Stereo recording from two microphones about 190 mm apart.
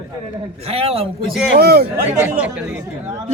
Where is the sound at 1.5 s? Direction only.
55° right (ahead or behind).